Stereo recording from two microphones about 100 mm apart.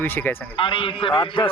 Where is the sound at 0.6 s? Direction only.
60° left (ahead or behind).